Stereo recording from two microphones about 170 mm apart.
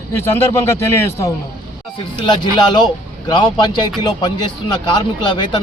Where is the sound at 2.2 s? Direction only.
25° left (ahead or behind).